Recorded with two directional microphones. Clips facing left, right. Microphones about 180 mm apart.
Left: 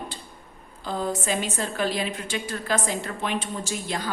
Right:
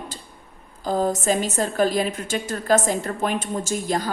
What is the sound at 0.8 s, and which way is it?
A woman's voice, 40° right (ahead or behind).